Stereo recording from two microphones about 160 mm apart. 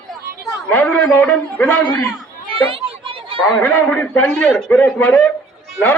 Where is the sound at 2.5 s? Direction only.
35° right (ahead or behind).